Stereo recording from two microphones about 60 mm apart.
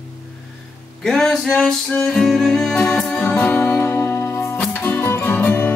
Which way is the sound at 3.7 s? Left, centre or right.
Left.